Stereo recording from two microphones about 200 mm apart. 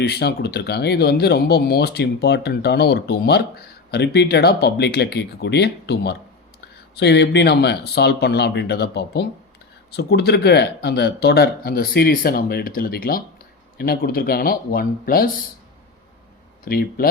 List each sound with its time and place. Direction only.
0.0 s speech: 50° left (ahead or behind)
16.6 s speech: 50° left (ahead or behind)